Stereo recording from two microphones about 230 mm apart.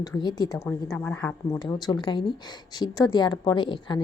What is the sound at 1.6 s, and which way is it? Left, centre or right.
A woman's voice, centre.